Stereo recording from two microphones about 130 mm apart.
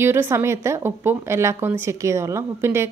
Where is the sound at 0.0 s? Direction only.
20° right (ahead or behind).